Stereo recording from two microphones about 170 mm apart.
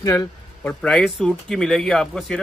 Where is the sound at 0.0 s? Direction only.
15° left (ahead or behind).